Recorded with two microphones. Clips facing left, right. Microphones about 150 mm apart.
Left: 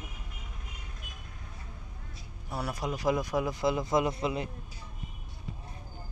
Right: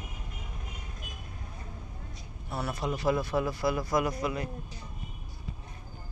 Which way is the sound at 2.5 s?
10° left (ahead or behind).